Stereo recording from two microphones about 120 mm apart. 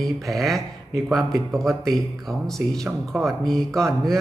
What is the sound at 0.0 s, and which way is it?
Speech, centre (ahead or behind).